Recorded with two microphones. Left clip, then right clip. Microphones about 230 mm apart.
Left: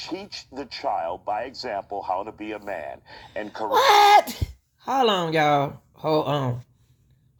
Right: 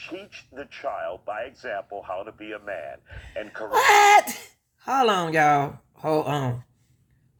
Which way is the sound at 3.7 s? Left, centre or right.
Right.